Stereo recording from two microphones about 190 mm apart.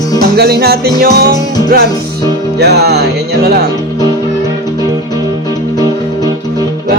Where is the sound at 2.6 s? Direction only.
60° right (ahead or behind).